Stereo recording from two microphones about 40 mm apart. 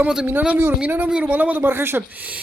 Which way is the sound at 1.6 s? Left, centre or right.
Right.